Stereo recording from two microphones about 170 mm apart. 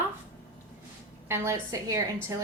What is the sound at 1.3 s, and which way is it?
Speech, 15° right (ahead or behind).